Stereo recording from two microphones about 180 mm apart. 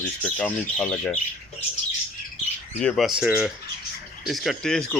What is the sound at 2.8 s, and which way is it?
Speech, centre (ahead or behind).